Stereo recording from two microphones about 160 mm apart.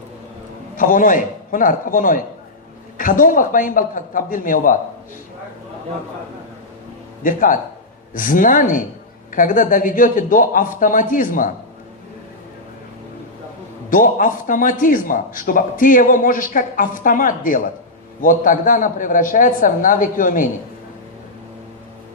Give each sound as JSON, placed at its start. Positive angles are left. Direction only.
{"t": 0.8, "sound": "a man's voice", "side_deg": 55}
{"t": 7.3, "sound": "a man's voice", "side_deg": 55}
{"t": 13.9, "sound": "a man's voice", "side_deg": 60}